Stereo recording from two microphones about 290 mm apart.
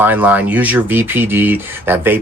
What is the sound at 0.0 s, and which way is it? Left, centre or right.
Speech, centre.